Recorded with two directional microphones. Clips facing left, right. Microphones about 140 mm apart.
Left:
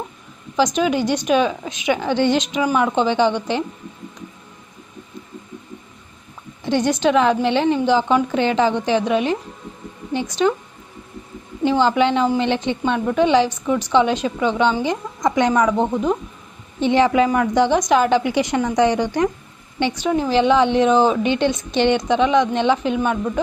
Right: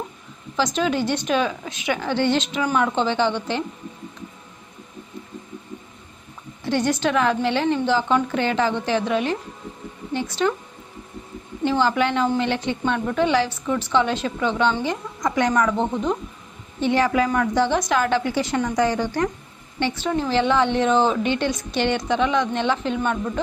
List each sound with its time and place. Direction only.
0.5 s a woman's voice: 15° left (ahead or behind)
6.6 s a woman's voice: 20° left (ahead or behind)
11.6 s a woman's voice: 20° left (ahead or behind)